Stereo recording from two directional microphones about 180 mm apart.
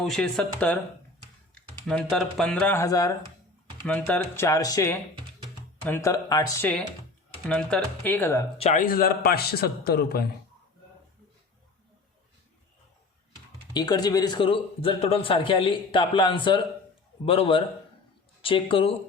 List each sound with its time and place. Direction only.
0.0 s speech: 5° left (ahead or behind)
1.9 s speech: 5° left (ahead or behind); by 3.2 s 20° left (ahead or behind)
3.8 s speech: 10° left (ahead or behind)
7.4 s speech: 5° left (ahead or behind)
8.5 s a man's voice: 35° left (ahead or behind)
8.8 s a man's voice: 55° left (ahead or behind)
13.7 s a man's voice: 20° left (ahead or behind)